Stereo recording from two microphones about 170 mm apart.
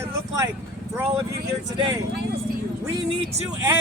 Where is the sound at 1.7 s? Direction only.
30° right (ahead or behind).